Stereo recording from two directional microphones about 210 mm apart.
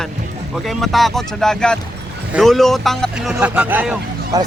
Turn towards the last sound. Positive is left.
turn(degrees=-15)  # may be behind; listen again after turning